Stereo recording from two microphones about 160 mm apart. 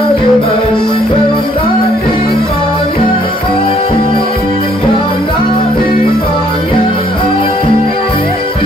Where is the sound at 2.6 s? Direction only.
35° left (ahead or behind).